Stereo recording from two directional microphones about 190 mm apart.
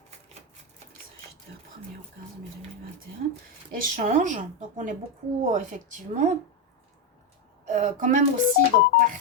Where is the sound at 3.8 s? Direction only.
40° right (ahead or behind).